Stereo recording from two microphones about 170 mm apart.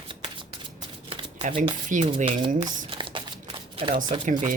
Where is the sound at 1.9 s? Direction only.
50° right (ahead or behind).